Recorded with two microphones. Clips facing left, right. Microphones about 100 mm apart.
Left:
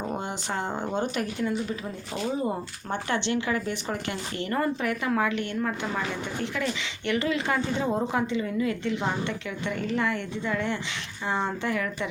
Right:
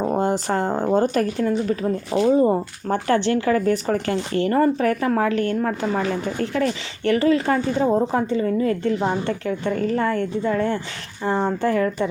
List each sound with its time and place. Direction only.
0.0 s a woman's voice: 40° right (ahead or behind)